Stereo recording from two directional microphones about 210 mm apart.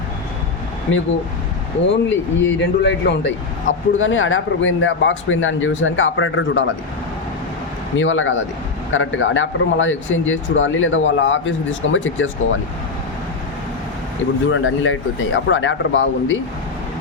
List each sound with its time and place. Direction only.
1.9 s speech: 60° left (ahead or behind)
7.9 s speech: 65° left (ahead or behind)
14.5 s speech: 65° left (ahead or behind)